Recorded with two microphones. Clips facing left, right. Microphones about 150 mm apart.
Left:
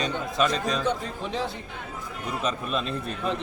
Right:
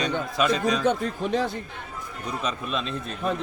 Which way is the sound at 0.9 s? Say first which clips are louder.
Right 5 dB; 50° right (ahead or behind).